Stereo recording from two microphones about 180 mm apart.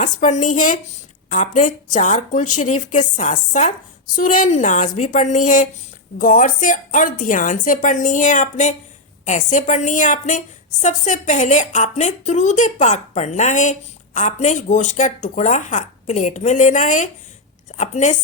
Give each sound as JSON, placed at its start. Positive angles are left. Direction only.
{"t": 0.0, "sound": "a woman's voice", "side_deg": 40}